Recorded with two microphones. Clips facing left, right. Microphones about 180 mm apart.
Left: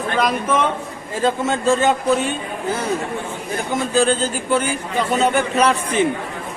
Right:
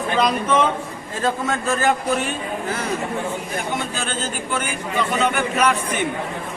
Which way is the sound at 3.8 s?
35° left (ahead or behind).